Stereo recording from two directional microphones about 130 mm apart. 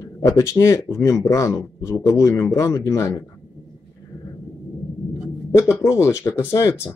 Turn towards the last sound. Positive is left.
turn(degrees=20)  # may be behind; listen again after turning